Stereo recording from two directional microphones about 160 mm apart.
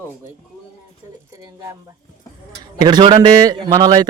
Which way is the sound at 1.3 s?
20° right (ahead or behind).